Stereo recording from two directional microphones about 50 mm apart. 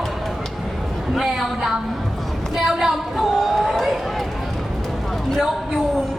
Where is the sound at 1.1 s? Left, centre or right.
Centre.